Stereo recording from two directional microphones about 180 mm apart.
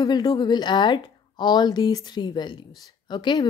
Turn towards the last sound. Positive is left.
turn(degrees=25)  # may be behind; listen again after turning